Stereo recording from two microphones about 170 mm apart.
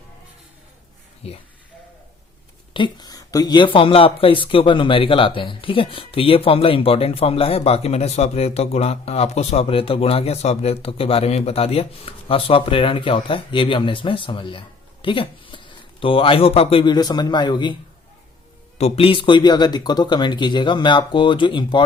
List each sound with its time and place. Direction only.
1.2 s speech: 35° left (ahead or behind)
2.7 s speech: 25° left (ahead or behind)
18.8 s speech: 35° left (ahead or behind)